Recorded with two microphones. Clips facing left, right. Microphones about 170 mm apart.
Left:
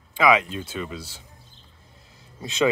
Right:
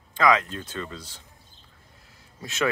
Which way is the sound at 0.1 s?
10° left (ahead or behind).